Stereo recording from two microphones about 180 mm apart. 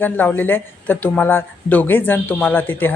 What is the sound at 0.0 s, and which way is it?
Speech, 10° left (ahead or behind).